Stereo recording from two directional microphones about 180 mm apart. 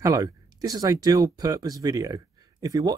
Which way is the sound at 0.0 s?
20° right (ahead or behind).